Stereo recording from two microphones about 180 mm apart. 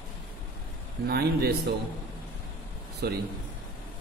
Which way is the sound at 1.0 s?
60° right (ahead or behind).